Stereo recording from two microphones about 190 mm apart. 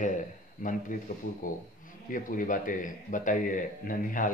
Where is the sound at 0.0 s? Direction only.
40° left (ahead or behind).